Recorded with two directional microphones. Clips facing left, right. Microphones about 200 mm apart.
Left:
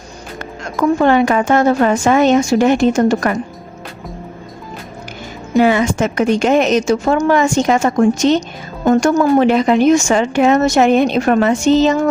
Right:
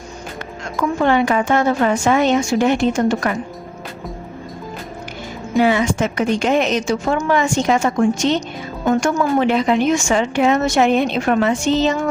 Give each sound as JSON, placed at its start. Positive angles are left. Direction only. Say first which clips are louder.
{"t": 0.8, "sound": "speech", "louder": "left 4 dB", "side_deg": 45}
{"t": 5.5, "sound": "speech", "louder": "left 3 dB", "side_deg": 50}